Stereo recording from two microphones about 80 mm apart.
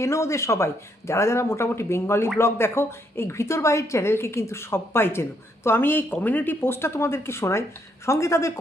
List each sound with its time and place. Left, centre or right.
0.0 s a woman's voice: left